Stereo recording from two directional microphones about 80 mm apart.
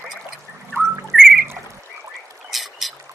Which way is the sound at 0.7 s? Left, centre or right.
Right.